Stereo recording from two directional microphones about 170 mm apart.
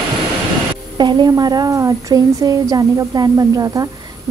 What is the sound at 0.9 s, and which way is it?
A woman's voice, 25° right (ahead or behind).